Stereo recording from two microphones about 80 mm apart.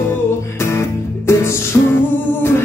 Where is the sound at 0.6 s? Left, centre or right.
Left.